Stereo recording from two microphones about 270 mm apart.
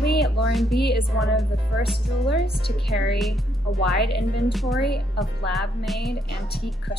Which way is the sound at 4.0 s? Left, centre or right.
Left.